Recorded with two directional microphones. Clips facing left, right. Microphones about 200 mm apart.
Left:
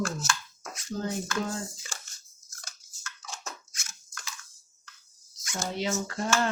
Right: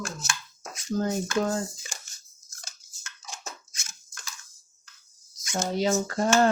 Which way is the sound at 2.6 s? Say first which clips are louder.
Left 1 dB; 20° right (ahead or behind).